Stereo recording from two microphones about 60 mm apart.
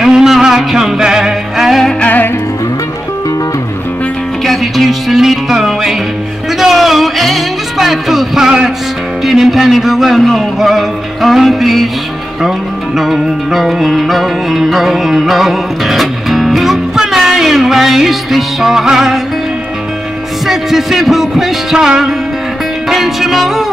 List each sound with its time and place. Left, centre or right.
0.0 s music: centre
2.0 s music: left
4.5 s music: centre
9.2 s a man's voice: centre
12.4 s music: centre
20.4 s a man's voice: centre
22.8 s music: centre